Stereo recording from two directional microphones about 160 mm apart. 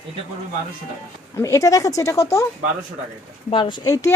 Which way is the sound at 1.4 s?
20° left (ahead or behind).